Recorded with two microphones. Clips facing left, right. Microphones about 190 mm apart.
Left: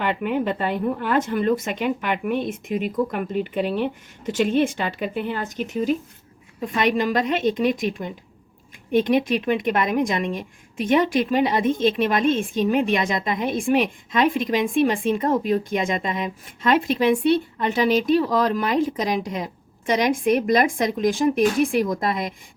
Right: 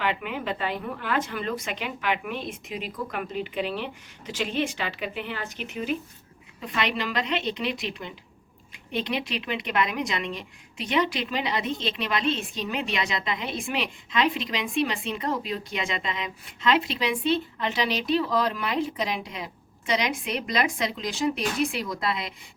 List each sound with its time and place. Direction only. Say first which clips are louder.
0.0 s speech: left 6 dB; 50° left (ahead or behind)